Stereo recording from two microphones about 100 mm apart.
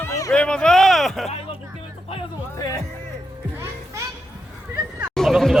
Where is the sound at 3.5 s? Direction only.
30° right (ahead or behind).